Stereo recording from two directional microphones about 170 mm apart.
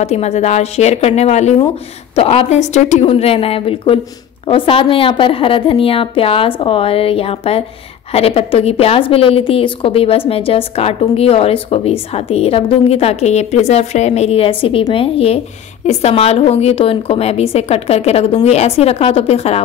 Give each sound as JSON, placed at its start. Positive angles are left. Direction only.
{"t": 0.0, "sound": "a woman's voice", "side_deg": 40}